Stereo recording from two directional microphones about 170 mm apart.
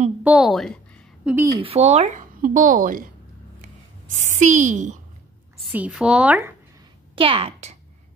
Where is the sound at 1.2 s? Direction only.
10° right (ahead or behind).